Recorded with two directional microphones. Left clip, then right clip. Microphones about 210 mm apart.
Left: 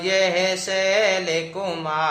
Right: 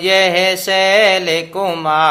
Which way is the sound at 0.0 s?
40° right (ahead or behind).